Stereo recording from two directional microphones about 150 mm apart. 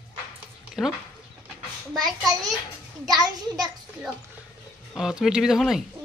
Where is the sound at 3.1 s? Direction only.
25° right (ahead or behind).